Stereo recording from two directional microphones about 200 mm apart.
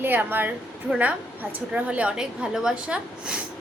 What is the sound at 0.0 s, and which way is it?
A woman's voice, 10° right (ahead or behind).